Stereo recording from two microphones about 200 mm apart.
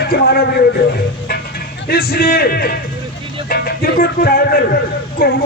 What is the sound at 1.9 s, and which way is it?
Speech, 50° left (ahead or behind).